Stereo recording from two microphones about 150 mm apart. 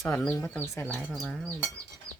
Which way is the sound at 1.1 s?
Centre (ahead or behind).